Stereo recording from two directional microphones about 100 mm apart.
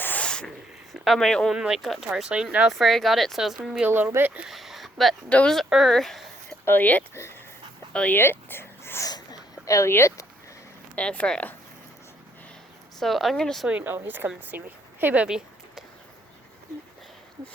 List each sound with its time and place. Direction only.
0.0 s a sound: 15° left (ahead or behind)
1.0 s speech: 5° left (ahead or behind)
1.5 s speech: 5° right (ahead or behind)
4.4 s a sound: centre (ahead or behind)
5.3 s speech: 10° left (ahead or behind)
5.6 s speech: centre (ahead or behind)
6.7 s speech: 15° left (ahead or behind)
9.0 s a sound: 40° left (ahead or behind)
10.9 s speech: 15° left (ahead or behind)
13.0 s speech: centre (ahead or behind)
13.7 s speech: 20° right (ahead or behind)